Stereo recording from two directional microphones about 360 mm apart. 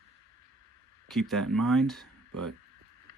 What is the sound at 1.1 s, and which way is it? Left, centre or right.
Speech, centre.